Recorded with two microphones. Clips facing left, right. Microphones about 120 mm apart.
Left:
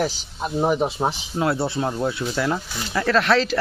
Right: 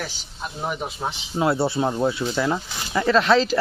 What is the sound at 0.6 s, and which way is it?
Speech, 35° left (ahead or behind).